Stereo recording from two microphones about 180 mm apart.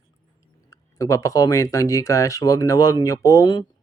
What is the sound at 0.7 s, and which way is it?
Speech, 20° left (ahead or behind).